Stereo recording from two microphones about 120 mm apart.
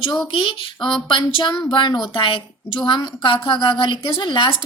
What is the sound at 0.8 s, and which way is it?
Speech, 5° left (ahead or behind).